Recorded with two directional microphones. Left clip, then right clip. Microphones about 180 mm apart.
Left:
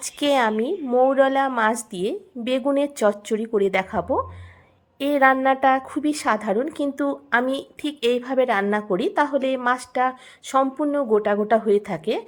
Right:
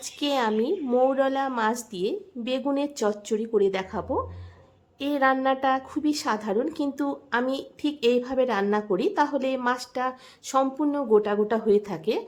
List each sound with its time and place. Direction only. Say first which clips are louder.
0.0 s a woman's voice: left 6 dB; 25° left (ahead or behind)